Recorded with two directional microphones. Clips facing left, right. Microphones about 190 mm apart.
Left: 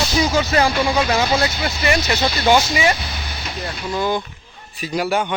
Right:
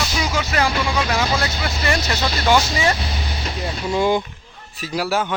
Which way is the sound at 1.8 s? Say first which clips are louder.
Left 3 dB; 15° left (ahead or behind).